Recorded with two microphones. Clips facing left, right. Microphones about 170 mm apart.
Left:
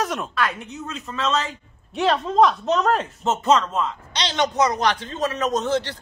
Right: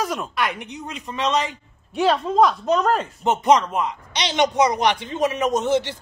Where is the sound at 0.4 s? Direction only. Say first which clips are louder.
Even; 15° right (ahead or behind).